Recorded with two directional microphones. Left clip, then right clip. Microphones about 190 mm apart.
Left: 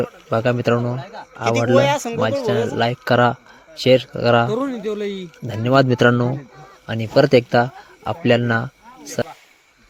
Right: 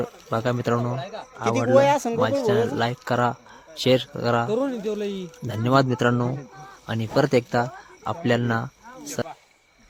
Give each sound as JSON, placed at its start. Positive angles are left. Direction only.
{"t": 0.0, "sound": "a man's voice", "side_deg": 10}
{"t": 1.7, "sound": "speech", "side_deg": -15}
{"t": 2.4, "sound": "speech", "side_deg": 5}
{"t": 3.8, "sound": "speech", "side_deg": 0}
{"t": 4.5, "sound": "speech", "side_deg": 45}
{"t": 5.5, "sound": "a man's voice", "side_deg": 5}
{"t": 6.8, "sound": "speech", "side_deg": 0}